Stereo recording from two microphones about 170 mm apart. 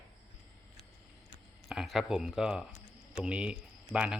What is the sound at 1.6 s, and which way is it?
Speech, centre (ahead or behind).